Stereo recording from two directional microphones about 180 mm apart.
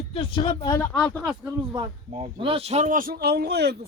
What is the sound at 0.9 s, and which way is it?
Speech, 5° left (ahead or behind).